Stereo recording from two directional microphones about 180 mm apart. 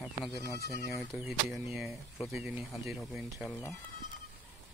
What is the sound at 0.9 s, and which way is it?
Speech, centre (ahead or behind).